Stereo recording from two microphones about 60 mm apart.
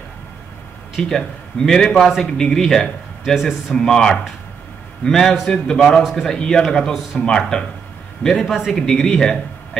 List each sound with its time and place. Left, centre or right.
1.0 s a man's voice: centre
2.2 s speech: centre
3.3 s a man's voice: centre
3.8 s a man's voice: centre